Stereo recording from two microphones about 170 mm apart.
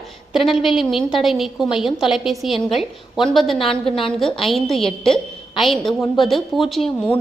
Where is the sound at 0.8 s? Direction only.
Centre (ahead or behind).